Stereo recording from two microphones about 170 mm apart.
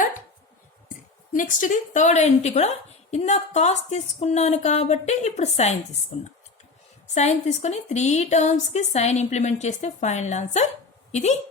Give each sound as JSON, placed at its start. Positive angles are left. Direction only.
{"t": 0.9, "sound": "a woman's voice", "side_deg": 50}